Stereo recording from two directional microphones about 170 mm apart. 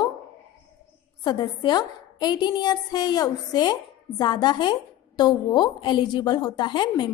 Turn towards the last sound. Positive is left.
turn(degrees=25)  # may be behind; listen again after turning